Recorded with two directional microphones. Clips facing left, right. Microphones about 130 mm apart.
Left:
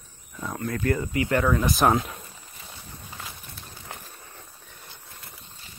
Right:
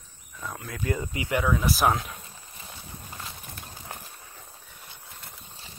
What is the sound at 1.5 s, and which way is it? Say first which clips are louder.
Speech: left 1 dB; centre (ahead or behind).